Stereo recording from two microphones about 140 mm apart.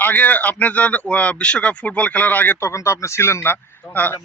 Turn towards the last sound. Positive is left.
turn(degrees=15)  # may be behind; listen again after turning